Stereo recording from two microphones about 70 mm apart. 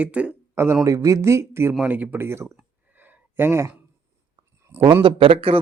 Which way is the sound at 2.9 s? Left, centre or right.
Right.